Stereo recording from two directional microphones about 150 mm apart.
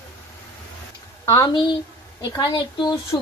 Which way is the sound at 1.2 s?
15° left (ahead or behind).